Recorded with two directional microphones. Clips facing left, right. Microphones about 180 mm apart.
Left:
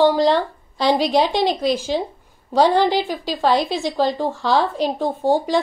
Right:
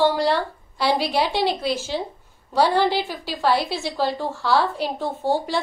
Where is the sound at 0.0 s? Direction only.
15° left (ahead or behind).